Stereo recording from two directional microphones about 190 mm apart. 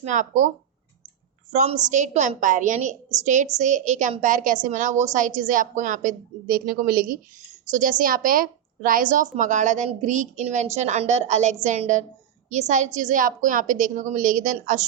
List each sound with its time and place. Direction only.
0.0 s a woman's voice: 40° right (ahead or behind)
1.5 s a woman's voice: 35° right (ahead or behind)